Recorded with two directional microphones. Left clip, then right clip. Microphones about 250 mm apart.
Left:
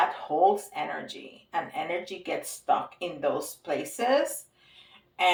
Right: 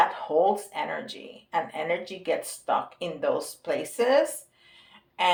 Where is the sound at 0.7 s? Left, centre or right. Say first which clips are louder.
Right 2 dB; right.